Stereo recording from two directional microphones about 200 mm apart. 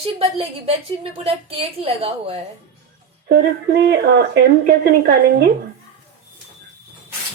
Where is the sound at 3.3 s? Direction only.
55° right (ahead or behind).